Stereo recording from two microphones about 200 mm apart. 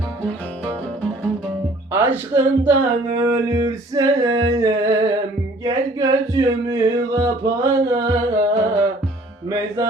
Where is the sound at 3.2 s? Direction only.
15° right (ahead or behind).